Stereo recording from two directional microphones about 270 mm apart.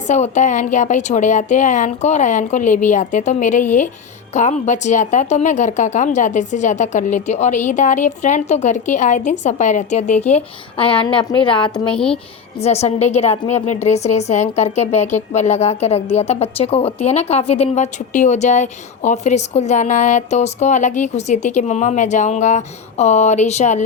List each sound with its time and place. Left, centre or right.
0.1 s a woman's voice: left
11.9 s speech: centre
12.5 s a woman's voice: left